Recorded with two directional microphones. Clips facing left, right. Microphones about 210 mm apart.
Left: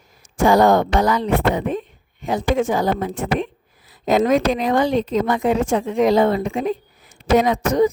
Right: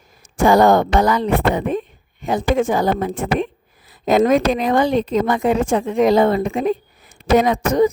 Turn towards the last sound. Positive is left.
turn(degrees=-50)  # may be behind; listen again after turning